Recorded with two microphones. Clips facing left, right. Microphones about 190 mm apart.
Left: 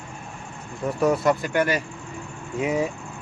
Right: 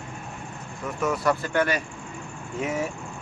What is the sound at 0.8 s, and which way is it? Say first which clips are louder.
Vehicle: left 6 dB; 30° left (ahead or behind).